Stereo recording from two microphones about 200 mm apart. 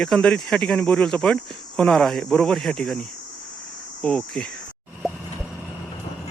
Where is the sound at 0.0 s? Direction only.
5° left (ahead or behind).